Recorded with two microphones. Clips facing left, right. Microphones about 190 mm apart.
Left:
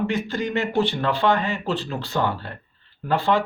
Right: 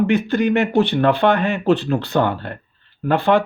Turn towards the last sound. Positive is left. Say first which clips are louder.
# right 5 dB
turn(degrees=-60)  # may be behind; listen again after turning